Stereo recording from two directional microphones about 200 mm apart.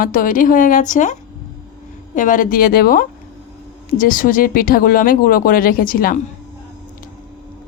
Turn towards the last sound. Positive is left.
turn(degrees=45)  # may be behind; listen again after turning